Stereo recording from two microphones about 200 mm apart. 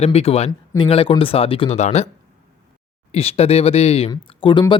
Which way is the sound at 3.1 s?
30° left (ahead or behind).